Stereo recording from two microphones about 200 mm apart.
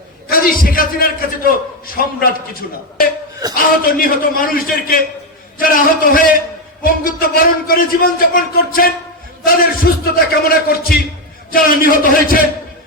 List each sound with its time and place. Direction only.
0.3 s a man's voice: 45° left (ahead or behind)
10.2 s a man's voice: 50° left (ahead or behind)